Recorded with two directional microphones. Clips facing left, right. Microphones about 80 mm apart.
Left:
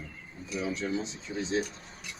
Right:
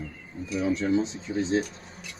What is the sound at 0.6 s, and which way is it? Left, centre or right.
Speech, right.